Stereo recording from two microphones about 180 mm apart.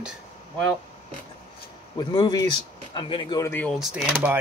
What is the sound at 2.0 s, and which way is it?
Speech, 20° left (ahead or behind).